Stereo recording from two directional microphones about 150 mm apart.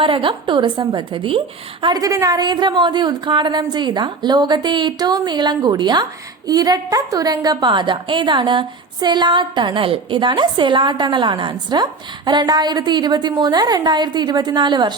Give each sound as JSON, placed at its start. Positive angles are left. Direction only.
{"t": 0.0, "sound": "a woman's voice", "side_deg": -35}